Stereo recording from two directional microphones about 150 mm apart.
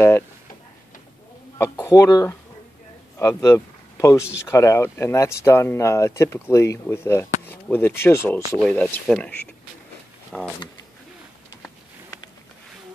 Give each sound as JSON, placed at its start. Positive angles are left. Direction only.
{"t": 1.6, "sound": "speech", "side_deg": 20}
{"t": 10.3, "sound": "speech", "side_deg": 10}